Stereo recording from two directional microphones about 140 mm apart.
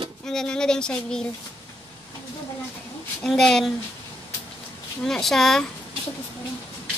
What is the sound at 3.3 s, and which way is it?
Speech, 5° left (ahead or behind).